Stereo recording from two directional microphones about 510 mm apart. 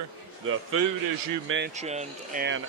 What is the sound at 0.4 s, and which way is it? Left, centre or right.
A man's voice, right.